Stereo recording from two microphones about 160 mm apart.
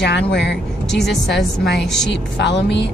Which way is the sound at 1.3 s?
Centre (ahead or behind).